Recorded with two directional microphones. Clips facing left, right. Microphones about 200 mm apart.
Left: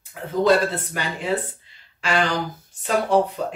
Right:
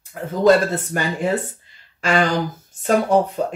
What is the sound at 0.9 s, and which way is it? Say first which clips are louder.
Speech: right 6 dB; 45° right (ahead or behind).